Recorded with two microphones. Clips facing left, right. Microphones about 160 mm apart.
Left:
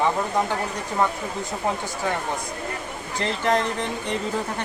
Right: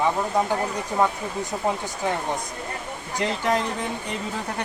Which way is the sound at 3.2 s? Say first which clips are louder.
Left 1 dB; 10° right (ahead or behind).